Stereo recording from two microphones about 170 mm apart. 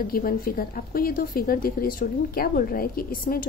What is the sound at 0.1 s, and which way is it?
A woman's voice, 60° left (ahead or behind).